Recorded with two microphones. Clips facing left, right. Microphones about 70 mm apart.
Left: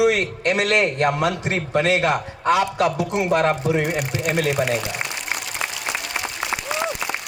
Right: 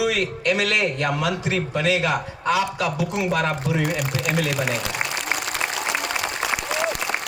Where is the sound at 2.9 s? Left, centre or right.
Left.